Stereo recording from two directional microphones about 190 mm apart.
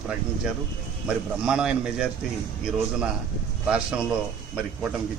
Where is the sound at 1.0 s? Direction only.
5° right (ahead or behind).